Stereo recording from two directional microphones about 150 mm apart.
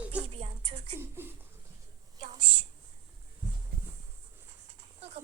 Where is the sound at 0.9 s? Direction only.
15° right (ahead or behind).